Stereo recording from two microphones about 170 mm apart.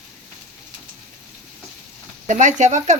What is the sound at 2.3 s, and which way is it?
Speech, 45° right (ahead or behind).